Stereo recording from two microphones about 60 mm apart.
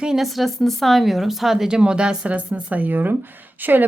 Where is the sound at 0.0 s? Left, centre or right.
Centre.